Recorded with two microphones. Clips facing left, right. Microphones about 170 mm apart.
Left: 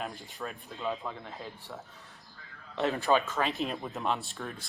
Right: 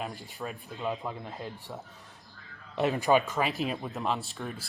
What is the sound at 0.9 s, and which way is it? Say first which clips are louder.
Speech: right 1 dB; 15° right (ahead or behind).